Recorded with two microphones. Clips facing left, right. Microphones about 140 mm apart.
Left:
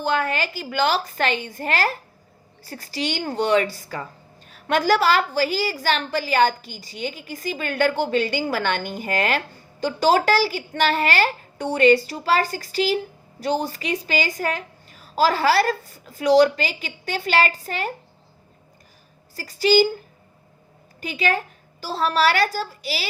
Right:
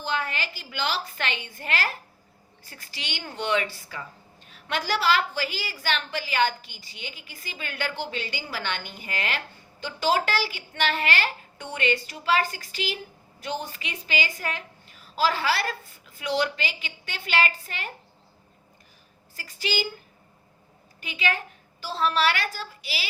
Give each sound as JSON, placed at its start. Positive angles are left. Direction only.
{"t": 0.0, "sound": "a woman's voice", "side_deg": 50}
{"t": 19.4, "sound": "a woman's voice", "side_deg": 35}
{"t": 21.0, "sound": "a woman's voice", "side_deg": 40}